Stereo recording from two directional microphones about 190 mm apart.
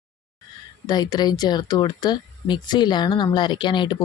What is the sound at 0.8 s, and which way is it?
Speech, 20° left (ahead or behind).